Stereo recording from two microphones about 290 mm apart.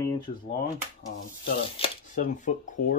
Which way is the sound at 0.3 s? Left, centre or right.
Left.